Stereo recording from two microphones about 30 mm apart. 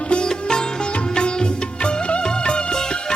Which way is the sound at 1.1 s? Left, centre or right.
Left.